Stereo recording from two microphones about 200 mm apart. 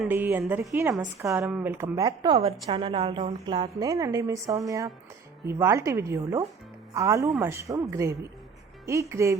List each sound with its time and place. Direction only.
0.0 s a woman's voice: 10° right (ahead or behind)